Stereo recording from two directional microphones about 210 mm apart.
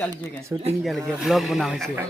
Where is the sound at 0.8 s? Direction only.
Centre (ahead or behind).